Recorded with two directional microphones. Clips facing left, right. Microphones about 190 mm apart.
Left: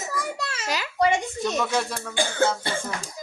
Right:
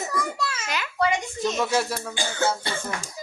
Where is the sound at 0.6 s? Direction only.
35° left (ahead or behind).